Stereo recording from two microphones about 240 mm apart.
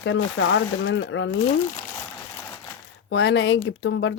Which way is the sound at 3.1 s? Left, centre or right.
Left.